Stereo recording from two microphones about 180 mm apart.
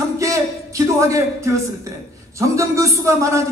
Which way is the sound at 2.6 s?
15° right (ahead or behind).